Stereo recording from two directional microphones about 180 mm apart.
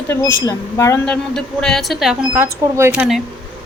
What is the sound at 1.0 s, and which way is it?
A woman's voice, 5° left (ahead or behind).